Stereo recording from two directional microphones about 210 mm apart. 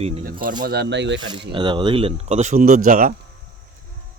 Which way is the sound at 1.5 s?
25° right (ahead or behind).